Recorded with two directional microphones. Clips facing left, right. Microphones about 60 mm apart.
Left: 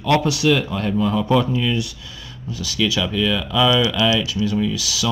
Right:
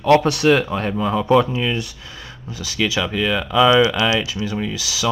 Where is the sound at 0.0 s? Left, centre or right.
Right.